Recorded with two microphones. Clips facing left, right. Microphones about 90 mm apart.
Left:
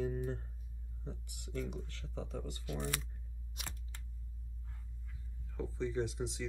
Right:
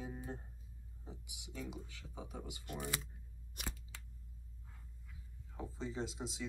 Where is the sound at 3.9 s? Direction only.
90° right.